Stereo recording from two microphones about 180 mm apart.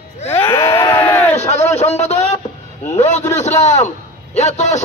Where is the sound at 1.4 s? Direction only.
35° left (ahead or behind).